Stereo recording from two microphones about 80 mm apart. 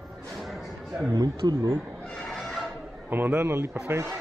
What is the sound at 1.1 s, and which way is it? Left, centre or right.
Speech, right.